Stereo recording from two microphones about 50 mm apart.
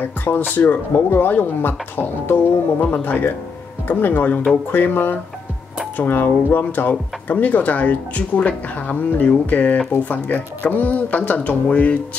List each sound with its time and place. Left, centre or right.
0.0 s speech: left